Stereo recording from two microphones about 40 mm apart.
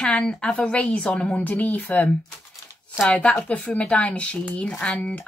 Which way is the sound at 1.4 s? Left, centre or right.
Left.